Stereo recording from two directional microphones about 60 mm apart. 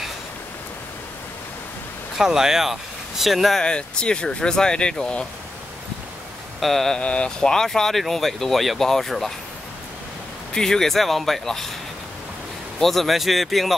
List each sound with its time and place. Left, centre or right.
2.1 s speech: centre
3.6 s speech: centre
6.6 s speech: centre
7.0 s speech: centre
10.5 s speech: centre
12.8 s speech: centre